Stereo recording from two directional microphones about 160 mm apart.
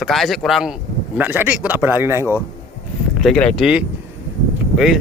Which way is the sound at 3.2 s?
5° left (ahead or behind).